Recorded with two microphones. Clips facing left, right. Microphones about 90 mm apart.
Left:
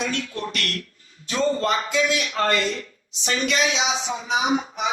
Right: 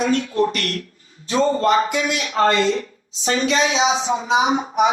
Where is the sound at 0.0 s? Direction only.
40° right (ahead or behind).